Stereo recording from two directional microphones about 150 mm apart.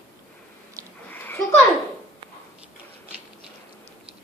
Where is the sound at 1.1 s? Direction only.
10° left (ahead or behind).